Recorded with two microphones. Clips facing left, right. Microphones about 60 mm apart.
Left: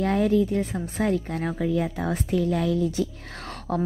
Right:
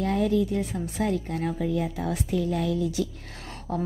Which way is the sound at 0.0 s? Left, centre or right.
Left.